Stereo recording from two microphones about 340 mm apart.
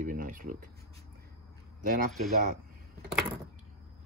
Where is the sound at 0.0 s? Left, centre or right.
Right.